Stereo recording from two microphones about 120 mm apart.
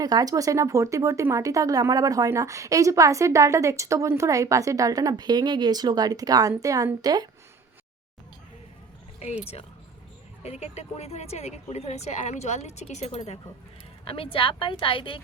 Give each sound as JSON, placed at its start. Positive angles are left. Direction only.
{"t": 0.0, "sound": "speech", "side_deg": -30}
{"t": 9.4, "sound": "a woman's voice", "side_deg": 55}
{"t": 14.1, "sound": "a woman's voice", "side_deg": 50}